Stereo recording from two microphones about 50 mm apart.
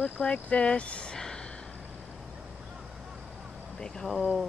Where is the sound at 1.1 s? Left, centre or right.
Centre.